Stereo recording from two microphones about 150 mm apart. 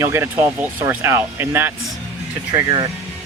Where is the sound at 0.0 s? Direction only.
15° right (ahead or behind).